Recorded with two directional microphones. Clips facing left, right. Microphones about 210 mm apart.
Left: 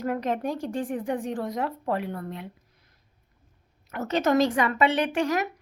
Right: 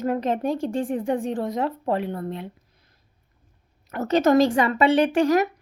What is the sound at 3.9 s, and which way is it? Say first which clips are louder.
Speech: right 5 dB; 35° right (ahead or behind).